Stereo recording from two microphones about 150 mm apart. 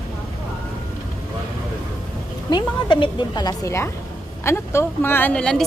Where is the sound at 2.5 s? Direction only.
30° left (ahead or behind).